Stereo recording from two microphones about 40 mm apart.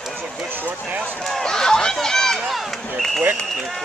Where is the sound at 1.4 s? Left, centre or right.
Centre.